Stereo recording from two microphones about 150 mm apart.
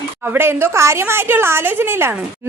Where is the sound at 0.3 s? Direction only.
15° right (ahead or behind).